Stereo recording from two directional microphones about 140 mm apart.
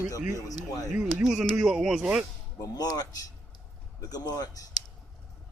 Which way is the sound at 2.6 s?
25° left (ahead or behind).